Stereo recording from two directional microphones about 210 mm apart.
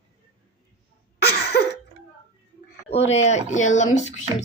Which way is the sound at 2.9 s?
30° left (ahead or behind).